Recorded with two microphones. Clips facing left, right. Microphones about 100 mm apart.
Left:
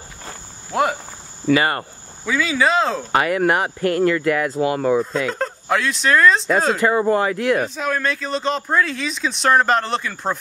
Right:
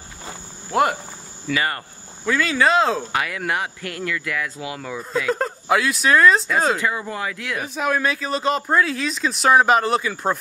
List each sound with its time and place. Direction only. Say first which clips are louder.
0.2 s insect: right 2 dB; 5° right (ahead or behind)
1.5 s speech: left 6 dB; 45° left (ahead or behind)
2.2 s speech: even; centre (ahead or behind)
3.1 s speech: left 7 dB; 40° left (ahead or behind)
5.3 s speech: right 1 dB; 5° right (ahead or behind)
6.8 s speech: left 8 dB; 45° left (ahead or behind)
7.7 s speech: right 1 dB; 5° right (ahead or behind)